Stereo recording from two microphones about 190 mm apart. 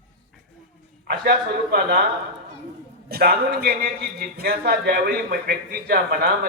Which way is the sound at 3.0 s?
55° right (ahead or behind).